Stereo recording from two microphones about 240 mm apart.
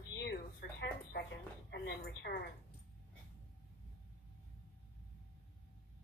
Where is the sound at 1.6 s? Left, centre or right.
Left.